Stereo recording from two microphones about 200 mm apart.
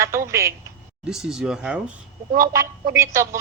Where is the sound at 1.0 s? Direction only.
Centre (ahead or behind).